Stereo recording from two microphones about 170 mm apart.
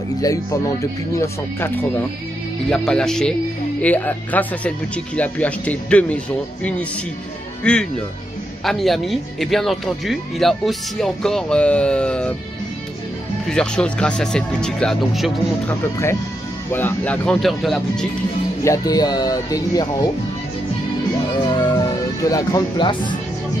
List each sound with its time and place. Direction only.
0.2 s speech: 20° left (ahead or behind)
2.7 s speech: 5° left (ahead or behind)
13.5 s speech: 5° left (ahead or behind)
16.7 s speech: 10° left (ahead or behind)
18.6 s speech: 20° left (ahead or behind)
21.5 s speech: 25° left (ahead or behind)